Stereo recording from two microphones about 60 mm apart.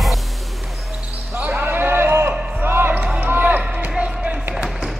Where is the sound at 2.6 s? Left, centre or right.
Right.